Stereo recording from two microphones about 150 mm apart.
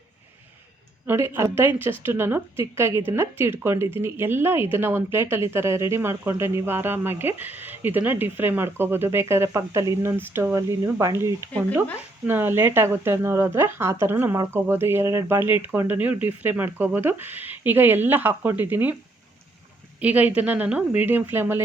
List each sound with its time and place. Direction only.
1.0 s speech: 15° right (ahead or behind)
20.0 s speech: 10° right (ahead or behind)